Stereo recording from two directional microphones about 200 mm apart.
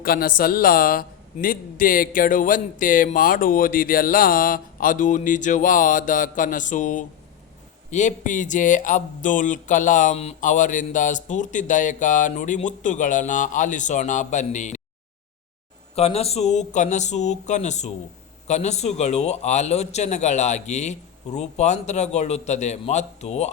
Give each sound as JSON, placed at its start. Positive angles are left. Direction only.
{"t": 0.0, "sound": "speech", "side_deg": 45}
{"t": 16.0, "sound": "speech", "side_deg": 30}